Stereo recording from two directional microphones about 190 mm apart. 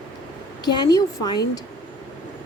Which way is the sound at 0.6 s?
20° left (ahead or behind).